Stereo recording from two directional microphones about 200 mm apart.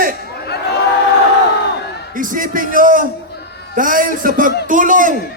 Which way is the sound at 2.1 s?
40° right (ahead or behind).